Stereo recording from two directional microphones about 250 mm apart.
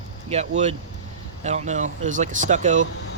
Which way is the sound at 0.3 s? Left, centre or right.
Right.